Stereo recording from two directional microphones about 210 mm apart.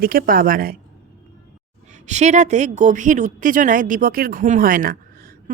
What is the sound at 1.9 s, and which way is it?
A woman's voice, 35° right (ahead or behind).